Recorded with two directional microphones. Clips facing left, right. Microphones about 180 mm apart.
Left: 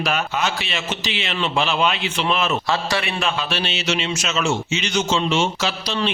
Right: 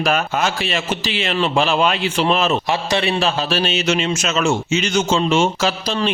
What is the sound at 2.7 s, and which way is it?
Speech, 20° right (ahead or behind).